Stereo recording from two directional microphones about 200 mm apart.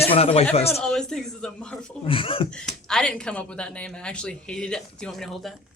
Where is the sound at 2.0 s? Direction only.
25° left (ahead or behind).